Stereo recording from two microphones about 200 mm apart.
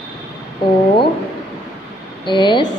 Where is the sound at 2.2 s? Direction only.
25° left (ahead or behind).